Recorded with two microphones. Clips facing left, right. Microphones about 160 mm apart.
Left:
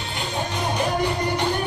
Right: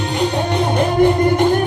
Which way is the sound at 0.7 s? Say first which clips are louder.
Right 10 dB; 55° right (ahead or behind).